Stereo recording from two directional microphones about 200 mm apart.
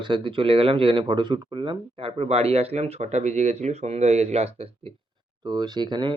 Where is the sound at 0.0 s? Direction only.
25° right (ahead or behind).